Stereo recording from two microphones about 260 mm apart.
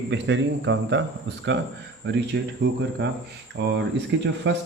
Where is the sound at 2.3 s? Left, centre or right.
Right.